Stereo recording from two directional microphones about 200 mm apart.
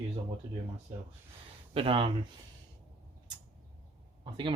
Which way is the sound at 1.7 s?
25° right (ahead or behind).